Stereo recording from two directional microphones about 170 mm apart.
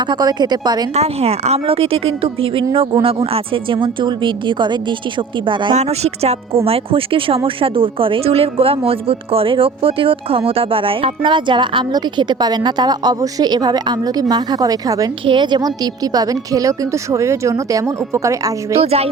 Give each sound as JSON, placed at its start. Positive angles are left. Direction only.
{"t": 0.0, "sound": "speech", "side_deg": -25}
{"t": 0.9, "sound": "a woman's voice", "side_deg": -35}
{"t": 5.7, "sound": "a woman's voice", "side_deg": -40}
{"t": 18.9, "sound": "a woman's voice", "side_deg": -35}